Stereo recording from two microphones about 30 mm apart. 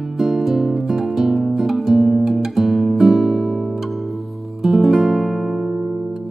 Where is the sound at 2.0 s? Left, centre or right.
Centre.